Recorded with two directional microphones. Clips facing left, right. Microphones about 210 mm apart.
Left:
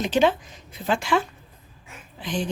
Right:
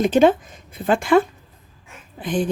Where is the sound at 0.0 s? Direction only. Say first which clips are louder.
Right 6 dB; 50° right (ahead or behind).